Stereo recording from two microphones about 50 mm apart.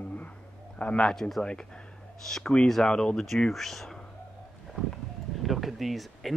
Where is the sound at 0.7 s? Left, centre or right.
Left.